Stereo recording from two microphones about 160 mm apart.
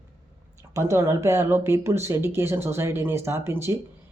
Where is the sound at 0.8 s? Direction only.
15° right (ahead or behind).